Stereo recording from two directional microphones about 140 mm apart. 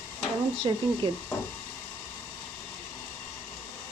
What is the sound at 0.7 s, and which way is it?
Speech, 35° right (ahead or behind).